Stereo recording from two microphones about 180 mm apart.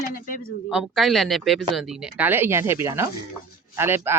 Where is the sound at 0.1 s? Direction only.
50° left (ahead or behind).